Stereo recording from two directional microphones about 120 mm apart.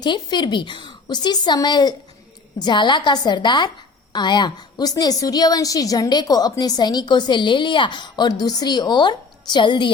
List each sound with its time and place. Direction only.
0.0 s a woman's voice: 40° left (ahead or behind)